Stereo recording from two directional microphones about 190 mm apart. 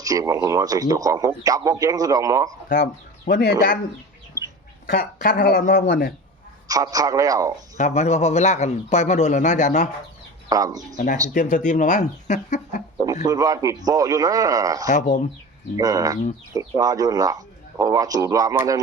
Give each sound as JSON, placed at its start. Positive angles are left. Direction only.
{"t": 0.0, "sound": "speech", "side_deg": -20}
{"t": 2.6, "sound": "speech", "side_deg": 55}
{"t": 4.9, "sound": "speech", "side_deg": 55}
{"t": 6.7, "sound": "speech", "side_deg": -20}
{"t": 7.8, "sound": "a man's voice", "side_deg": 35}
{"t": 10.5, "sound": "speech", "side_deg": -20}
{"t": 10.9, "sound": "a man's voice", "side_deg": 40}
{"t": 13.2, "sound": "speech", "side_deg": -20}
{"t": 14.8, "sound": "a man's voice", "side_deg": 40}
{"t": 15.8, "sound": "speech", "side_deg": -20}